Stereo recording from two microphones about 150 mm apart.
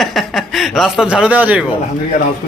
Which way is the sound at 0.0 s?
Centre (ahead or behind).